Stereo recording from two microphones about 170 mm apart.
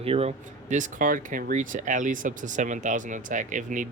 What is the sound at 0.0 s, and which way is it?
Speech, 35° right (ahead or behind).